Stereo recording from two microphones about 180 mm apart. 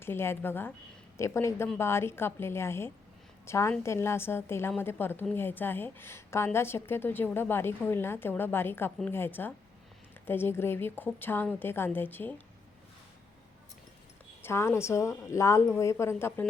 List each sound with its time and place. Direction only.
0.0 s a woman's voice: 15° left (ahead or behind)
14.4 s a woman's voice: 15° left (ahead or behind)